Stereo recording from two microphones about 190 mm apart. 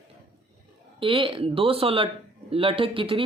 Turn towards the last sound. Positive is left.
turn(degrees=-30)  # may be behind; listen again after turning